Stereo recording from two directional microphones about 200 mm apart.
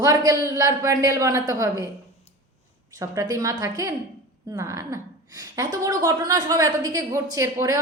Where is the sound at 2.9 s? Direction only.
15° right (ahead or behind).